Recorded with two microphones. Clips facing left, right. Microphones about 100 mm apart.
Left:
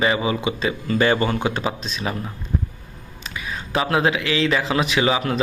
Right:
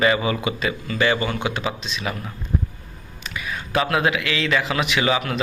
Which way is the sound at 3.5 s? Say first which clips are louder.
Even; 30° left (ahead or behind).